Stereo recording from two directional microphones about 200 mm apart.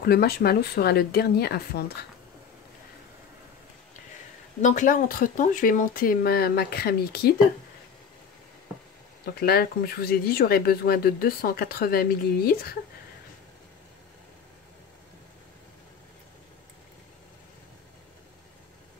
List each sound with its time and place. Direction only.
0.0 s speech: 50° left (ahead or behind)
4.6 s speech: 40° left (ahead or behind)
9.2 s speech: 50° left (ahead or behind)